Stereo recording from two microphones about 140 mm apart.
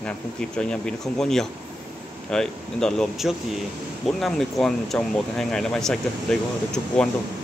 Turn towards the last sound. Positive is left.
turn(degrees=5)  # may be behind; listen again after turning